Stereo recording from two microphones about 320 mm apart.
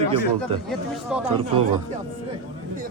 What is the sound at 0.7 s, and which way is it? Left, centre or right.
Speech, centre.